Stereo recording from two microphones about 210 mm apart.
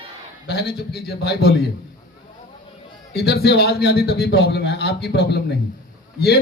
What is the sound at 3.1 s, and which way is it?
A man's voice, 50° left (ahead or behind).